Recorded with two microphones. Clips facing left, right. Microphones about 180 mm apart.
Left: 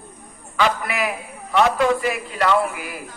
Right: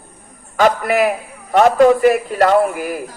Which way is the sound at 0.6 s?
45° right (ahead or behind).